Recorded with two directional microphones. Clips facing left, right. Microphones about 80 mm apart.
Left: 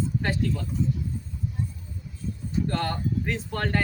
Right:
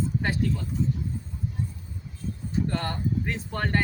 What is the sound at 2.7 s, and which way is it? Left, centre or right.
Speech, centre.